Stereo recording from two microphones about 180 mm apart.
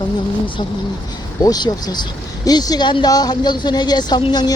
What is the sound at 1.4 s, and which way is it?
Speech, 20° left (ahead or behind).